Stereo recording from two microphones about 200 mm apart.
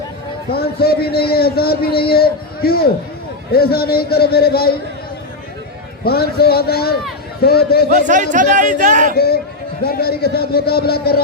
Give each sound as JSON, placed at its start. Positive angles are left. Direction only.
{"t": 0.5, "sound": "a man's voice", "side_deg": 50}
{"t": 6.1, "sound": "a man's voice", "side_deg": 50}
{"t": 8.0, "sound": "a man's voice", "side_deg": -40}
{"t": 9.1, "sound": "a man's voice", "side_deg": 50}